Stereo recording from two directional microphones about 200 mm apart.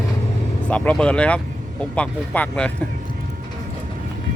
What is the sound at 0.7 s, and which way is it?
Speech, 5° left (ahead or behind).